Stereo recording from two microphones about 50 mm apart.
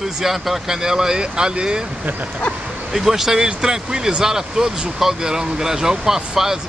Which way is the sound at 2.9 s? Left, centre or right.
Centre.